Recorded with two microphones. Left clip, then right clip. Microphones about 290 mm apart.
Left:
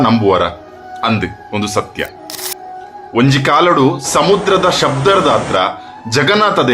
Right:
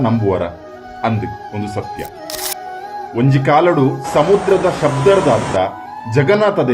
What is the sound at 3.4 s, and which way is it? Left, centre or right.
Speech, left.